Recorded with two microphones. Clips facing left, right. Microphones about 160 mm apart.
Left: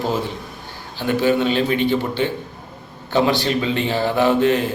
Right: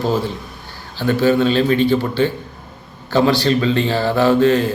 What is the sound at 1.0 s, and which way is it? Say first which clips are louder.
A man's voice: right 3 dB; 15° left (ahead or behind).